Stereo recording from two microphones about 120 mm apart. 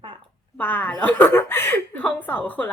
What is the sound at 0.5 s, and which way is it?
A woman's voice, 15° left (ahead or behind).